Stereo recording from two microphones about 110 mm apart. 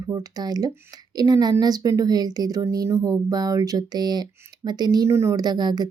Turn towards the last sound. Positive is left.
turn(degrees=-40)  # may be behind; listen again after turning